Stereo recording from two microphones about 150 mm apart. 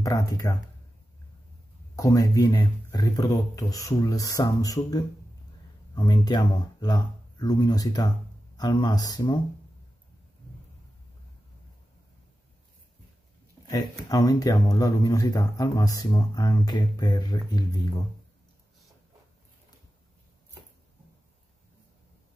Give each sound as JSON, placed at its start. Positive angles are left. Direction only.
{"t": 0.0, "sound": "speech", "side_deg": 20}
{"t": 2.0, "sound": "speech", "side_deg": 20}
{"t": 13.7, "sound": "speech", "side_deg": 25}